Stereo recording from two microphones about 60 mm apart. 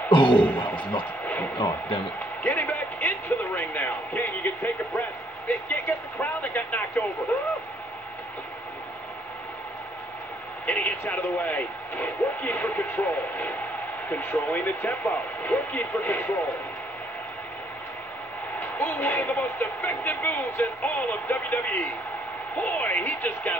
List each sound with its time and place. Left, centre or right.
0.0 s speech: left
2.1 s music: left
5.5 s speech: left
7.3 s speech: left
10.7 s a woman's voice: left
18.6 s a woman's voice: left